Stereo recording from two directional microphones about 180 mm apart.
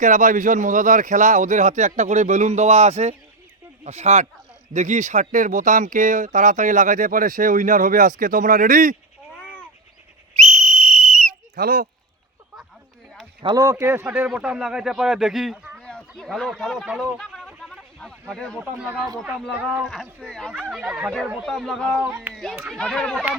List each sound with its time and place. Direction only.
0.0 s speech: 45° right (ahead or behind)
10.3 s whistle: 40° right (ahead or behind)
11.5 s speech: 55° right (ahead or behind)
13.4 s a man's voice: 25° right (ahead or behind); by 15.7 s centre (ahead or behind)
15.8 s a sound: 5° left (ahead or behind)
18.6 s a man's voice: 10° right (ahead or behind)